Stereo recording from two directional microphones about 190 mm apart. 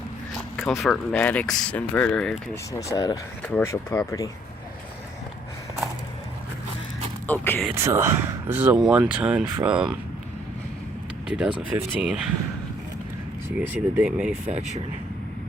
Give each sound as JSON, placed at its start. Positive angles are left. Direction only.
{"t": 0.5, "sound": "speech", "side_deg": 0}
{"t": 2.9, "sound": "speech", "side_deg": 20}
{"t": 3.4, "sound": "speech", "side_deg": 10}
{"t": 7.3, "sound": "speech", "side_deg": 10}
{"t": 7.7, "sound": "speech", "side_deg": -15}
{"t": 11.3, "sound": "speech", "side_deg": -5}
{"t": 13.6, "sound": "speech", "side_deg": -5}
{"t": 14.4, "sound": "speech", "side_deg": -35}